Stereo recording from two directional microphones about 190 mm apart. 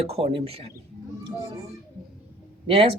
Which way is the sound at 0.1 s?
30° right (ahead or behind).